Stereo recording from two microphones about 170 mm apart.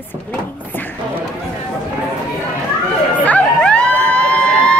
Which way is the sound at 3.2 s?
5° left (ahead or behind).